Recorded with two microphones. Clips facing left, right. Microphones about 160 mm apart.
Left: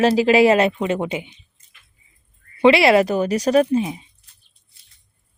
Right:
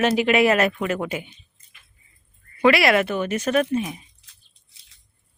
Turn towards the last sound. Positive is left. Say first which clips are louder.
# even
turn(degrees=-90)